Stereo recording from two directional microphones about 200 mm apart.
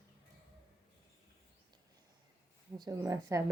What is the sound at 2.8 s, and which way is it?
Speech, 15° right (ahead or behind).